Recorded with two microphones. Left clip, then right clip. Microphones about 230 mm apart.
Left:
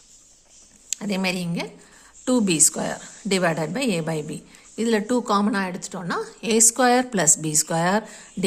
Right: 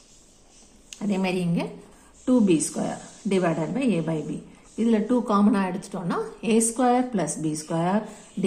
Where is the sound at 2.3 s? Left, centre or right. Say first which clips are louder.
Left 1 dB; left.